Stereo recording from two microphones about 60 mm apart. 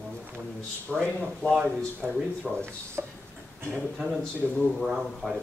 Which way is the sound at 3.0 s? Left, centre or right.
Right.